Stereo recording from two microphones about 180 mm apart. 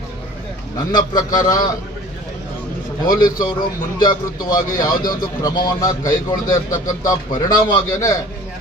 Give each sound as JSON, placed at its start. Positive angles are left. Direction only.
{"t": 0.9, "sound": "a man's voice", "side_deg": 20}
{"t": 3.1, "sound": "a man's voice", "side_deg": 20}